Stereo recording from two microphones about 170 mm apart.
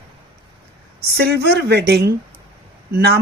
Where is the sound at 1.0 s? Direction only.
70° right (ahead or behind).